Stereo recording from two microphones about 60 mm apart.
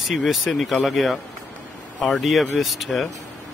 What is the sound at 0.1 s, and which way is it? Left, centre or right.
Speech, centre.